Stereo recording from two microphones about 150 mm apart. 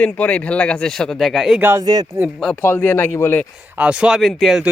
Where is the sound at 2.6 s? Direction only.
15° left (ahead or behind).